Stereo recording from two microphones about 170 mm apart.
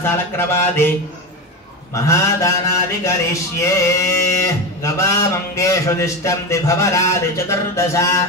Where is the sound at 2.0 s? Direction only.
20° left (ahead or behind).